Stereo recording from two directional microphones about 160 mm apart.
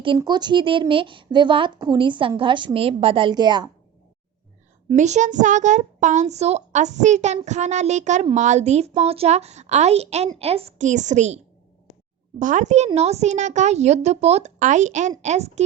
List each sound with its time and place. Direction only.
0.2 s a woman's voice: 25° right (ahead or behind)
4.9 s speech: 45° right (ahead or behind)
12.4 s speech: 50° right (ahead or behind)